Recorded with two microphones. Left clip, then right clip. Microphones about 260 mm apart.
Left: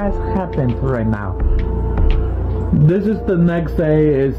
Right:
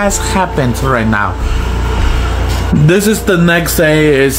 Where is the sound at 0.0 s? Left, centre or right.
Centre.